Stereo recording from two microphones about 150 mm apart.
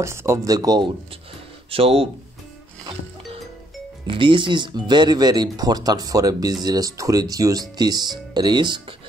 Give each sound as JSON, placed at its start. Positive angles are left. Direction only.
{"t": 0.0, "sound": "speech", "side_deg": -20}
{"t": 1.7, "sound": "speech", "side_deg": -40}
{"t": 4.1, "sound": "speech", "side_deg": -35}